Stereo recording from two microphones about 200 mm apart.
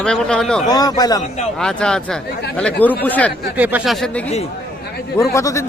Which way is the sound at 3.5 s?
5° right (ahead or behind).